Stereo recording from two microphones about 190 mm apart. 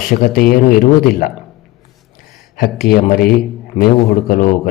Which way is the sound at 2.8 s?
50° left (ahead or behind).